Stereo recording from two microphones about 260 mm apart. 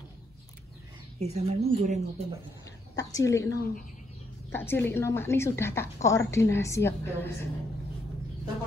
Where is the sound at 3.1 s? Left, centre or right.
Centre.